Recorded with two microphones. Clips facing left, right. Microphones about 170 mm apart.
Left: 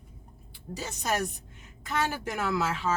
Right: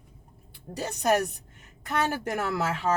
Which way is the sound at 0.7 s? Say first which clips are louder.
Right 6 dB; 60° right (ahead or behind).